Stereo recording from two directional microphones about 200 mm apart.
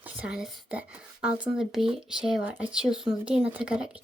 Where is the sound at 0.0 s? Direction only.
5° right (ahead or behind).